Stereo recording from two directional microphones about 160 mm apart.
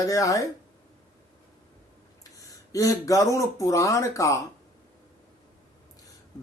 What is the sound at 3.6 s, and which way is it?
Speech, 20° left (ahead or behind).